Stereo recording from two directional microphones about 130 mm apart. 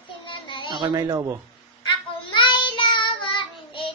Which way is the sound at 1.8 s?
40° left (ahead or behind).